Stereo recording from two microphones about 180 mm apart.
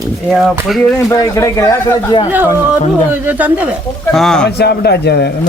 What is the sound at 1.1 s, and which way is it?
Speech, 15° left (ahead or behind).